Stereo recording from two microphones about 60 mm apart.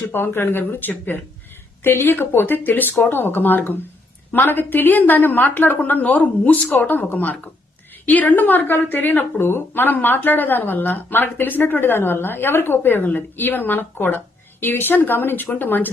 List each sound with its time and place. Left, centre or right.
0.1 s a woman's voice: left